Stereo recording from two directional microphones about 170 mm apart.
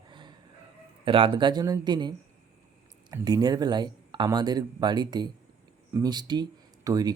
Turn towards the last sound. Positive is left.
turn(degrees=-20)  # may be behind; listen again after turning